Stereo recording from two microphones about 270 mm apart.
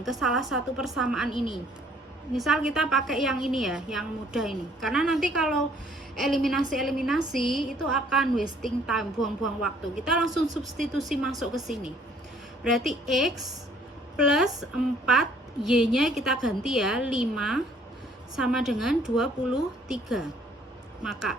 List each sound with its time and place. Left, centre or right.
0.0 s a woman's voice: centre
1.3 s a woman's voice: centre
2.3 s a woman's voice: centre